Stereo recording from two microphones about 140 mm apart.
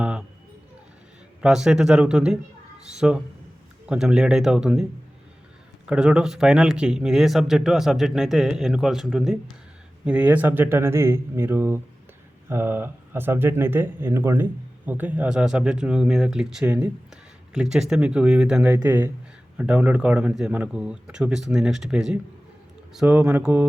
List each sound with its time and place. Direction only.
0.0 s a sound: 5° right (ahead or behind)
1.4 s speech: 5° right (ahead or behind)
5.9 s speech: 5° right (ahead or behind)
16.6 s speech: 15° right (ahead or behind)
17.5 s speech: 5° right (ahead or behind)
18.6 s speech: 20° right (ahead or behind)